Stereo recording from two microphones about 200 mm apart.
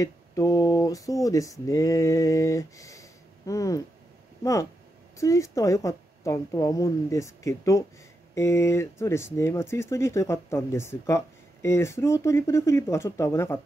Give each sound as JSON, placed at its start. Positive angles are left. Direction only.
{"t": 0.0, "sound": "speech", "side_deg": 15}